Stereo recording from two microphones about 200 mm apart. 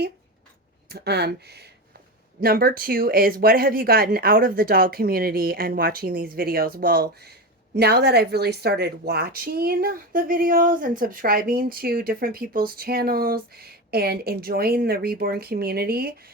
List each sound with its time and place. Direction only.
0.9 s a woman's voice: 55° right (ahead or behind)